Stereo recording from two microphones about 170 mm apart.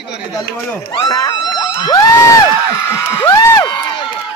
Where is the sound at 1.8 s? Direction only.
20° left (ahead or behind).